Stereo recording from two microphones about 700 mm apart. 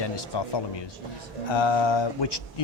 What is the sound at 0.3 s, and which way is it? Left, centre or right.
Speech, left.